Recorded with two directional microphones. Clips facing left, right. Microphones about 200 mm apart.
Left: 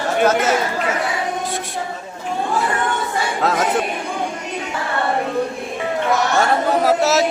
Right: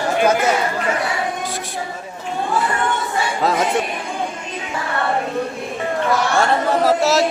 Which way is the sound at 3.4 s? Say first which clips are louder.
Right 1 dB; centre (ahead or behind).